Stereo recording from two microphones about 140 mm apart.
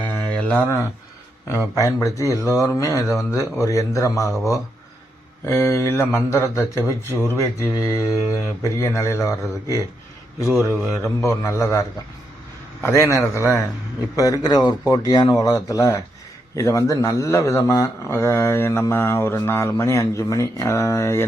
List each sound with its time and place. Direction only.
0.3 s a sound: 10° left (ahead or behind)
1.5 s speech: 20° left (ahead or behind)
10.8 s speech: 20° left (ahead or behind)